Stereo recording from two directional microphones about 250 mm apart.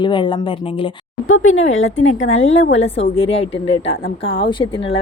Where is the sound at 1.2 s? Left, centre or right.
Left.